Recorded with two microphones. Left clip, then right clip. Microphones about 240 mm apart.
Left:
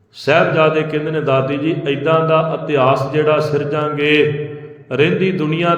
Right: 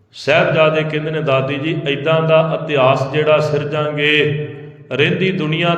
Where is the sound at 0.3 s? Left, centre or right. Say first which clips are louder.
Even; centre.